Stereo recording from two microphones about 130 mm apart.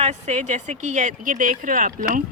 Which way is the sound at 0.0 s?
60° right (ahead or behind).